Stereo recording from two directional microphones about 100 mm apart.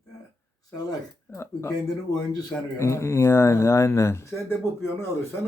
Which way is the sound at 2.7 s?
30° left (ahead or behind).